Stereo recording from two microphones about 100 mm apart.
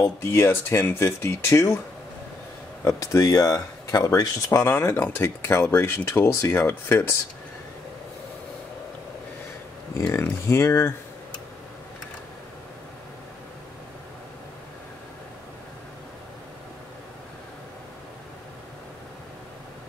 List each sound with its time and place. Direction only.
0.0 s speech: 25° left (ahead or behind)
2.8 s speech: 30° left (ahead or behind)
10.1 s speech: 25° left (ahead or behind)